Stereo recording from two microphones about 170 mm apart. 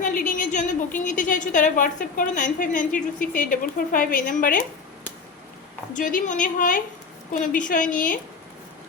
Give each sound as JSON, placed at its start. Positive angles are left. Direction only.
{"t": 0.0, "sound": "a woman's voice", "side_deg": 55}
{"t": 5.9, "sound": "a woman's voice", "side_deg": 50}